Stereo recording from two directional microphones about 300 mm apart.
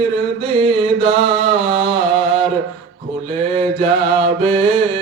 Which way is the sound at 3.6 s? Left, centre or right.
Centre.